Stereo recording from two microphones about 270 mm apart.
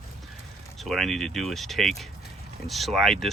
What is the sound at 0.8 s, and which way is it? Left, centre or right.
Speech, centre.